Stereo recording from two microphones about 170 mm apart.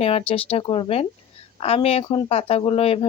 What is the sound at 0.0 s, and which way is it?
Speech, 35° left (ahead or behind).